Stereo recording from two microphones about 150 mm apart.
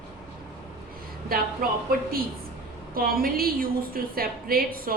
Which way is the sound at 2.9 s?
80° right.